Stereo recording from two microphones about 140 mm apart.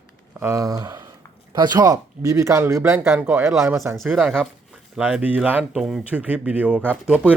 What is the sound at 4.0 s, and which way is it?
Speech, centre (ahead or behind).